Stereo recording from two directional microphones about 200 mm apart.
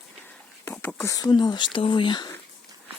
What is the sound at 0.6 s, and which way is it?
Speech, 10° left (ahead or behind).